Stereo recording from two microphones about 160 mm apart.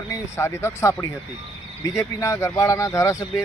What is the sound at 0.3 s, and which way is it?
Speech, 15° left (ahead or behind).